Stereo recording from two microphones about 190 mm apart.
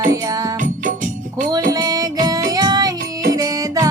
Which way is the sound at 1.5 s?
20° right (ahead or behind).